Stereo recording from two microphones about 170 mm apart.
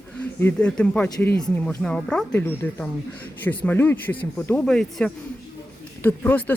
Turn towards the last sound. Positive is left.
turn(degrees=10)  # may be behind; listen again after turning